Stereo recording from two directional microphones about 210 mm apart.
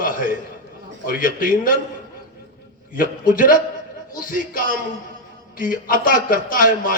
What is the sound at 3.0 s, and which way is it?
A man's voice, 40° left (ahead or behind).